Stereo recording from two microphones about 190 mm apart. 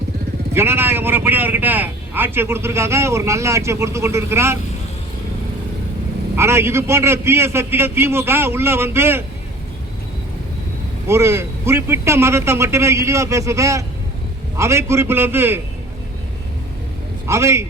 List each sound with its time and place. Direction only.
0.5 s a man's voice: 10° right (ahead or behind)
6.3 s a man's voice: 15° right (ahead or behind)
11.1 s a man's voice: 15° right (ahead or behind)
17.2 s a man's voice: 15° right (ahead or behind)